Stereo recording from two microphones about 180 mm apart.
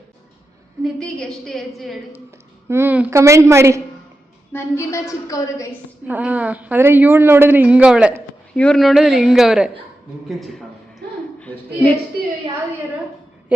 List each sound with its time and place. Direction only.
0.9 s a woman's voice: 5° left (ahead or behind)
2.6 s a woman's voice: 15° right (ahead or behind)
4.5 s a woman's voice: 15° left (ahead or behind)
6.1 s a woman's voice: 10° right (ahead or behind)
11.0 s a sound: 65° right (ahead or behind)
11.3 s a woman's voice: 5° left (ahead or behind)